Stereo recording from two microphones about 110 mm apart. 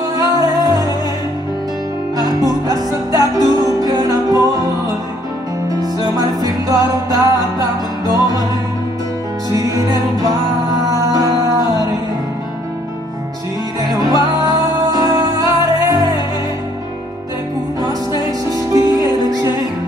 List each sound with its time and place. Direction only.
0.1 s music: 35° right (ahead or behind)
2.7 s music: 35° right (ahead or behind)
9.5 s music: 30° right (ahead or behind)
13.9 s music: 35° right (ahead or behind)
18.2 s music: 35° right (ahead or behind)